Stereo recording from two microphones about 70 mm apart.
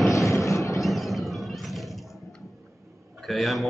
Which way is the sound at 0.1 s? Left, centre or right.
Left.